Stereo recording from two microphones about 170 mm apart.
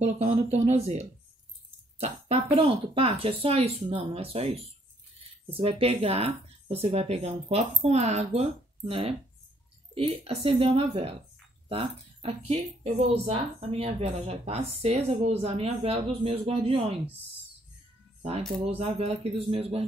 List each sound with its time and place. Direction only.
0.0 s speech: 40° right (ahead or behind)
5.5 s speech: 35° right (ahead or behind)
18.7 s speech: 35° right (ahead or behind)